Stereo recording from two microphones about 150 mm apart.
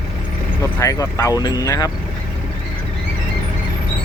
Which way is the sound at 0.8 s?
20° left (ahead or behind).